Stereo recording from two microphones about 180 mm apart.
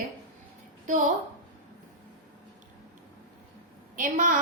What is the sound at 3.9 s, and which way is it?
Speech, 45° right (ahead or behind).